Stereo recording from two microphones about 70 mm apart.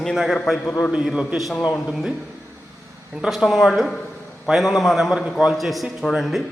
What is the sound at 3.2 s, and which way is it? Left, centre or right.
A man's voice, centre.